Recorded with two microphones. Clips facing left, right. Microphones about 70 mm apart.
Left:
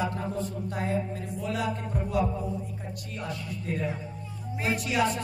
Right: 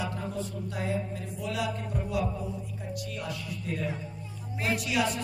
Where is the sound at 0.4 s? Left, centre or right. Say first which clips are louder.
Left 2 dB; left.